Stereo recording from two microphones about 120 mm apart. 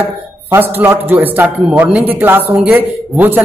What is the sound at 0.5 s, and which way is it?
A man's voice, 20° right (ahead or behind).